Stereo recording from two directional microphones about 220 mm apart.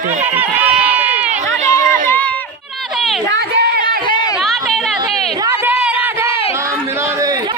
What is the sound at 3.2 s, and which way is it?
Speech, 50° right (ahead or behind).